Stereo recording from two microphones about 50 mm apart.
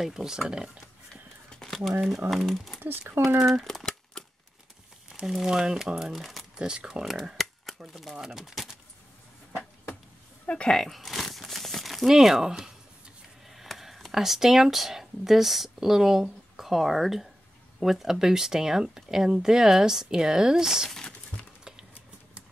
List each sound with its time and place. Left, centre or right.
0.0 s speech: centre
1.8 s speech: centre
2.8 s speech: right
3.6 s a sound: centre
5.2 s speech: centre
6.2 s crumpling: centre
6.6 s speech: centre
8.4 s a sound: centre
10.7 s crumpling: centre
13.5 s speech: centre
20.9 s a sound: centre